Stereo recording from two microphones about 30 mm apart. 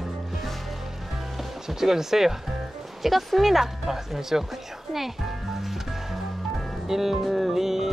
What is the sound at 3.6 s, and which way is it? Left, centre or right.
Speech, centre.